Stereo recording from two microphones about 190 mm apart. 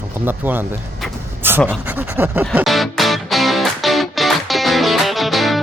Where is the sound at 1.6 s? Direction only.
10° right (ahead or behind).